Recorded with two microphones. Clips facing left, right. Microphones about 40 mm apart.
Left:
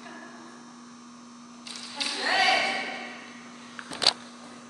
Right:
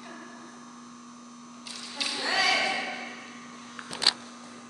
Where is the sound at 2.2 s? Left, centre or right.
Left.